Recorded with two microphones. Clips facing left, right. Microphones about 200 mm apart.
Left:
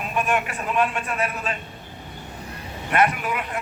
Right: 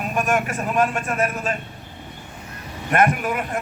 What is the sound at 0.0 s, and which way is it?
A man's voice, 45° right (ahead or behind).